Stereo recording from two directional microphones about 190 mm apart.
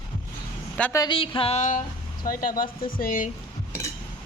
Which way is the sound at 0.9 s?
25° left (ahead or behind).